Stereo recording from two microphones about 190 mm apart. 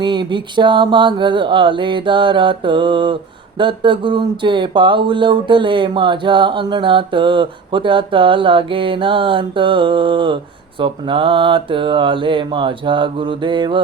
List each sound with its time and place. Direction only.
0.0 s speech: 25° right (ahead or behind)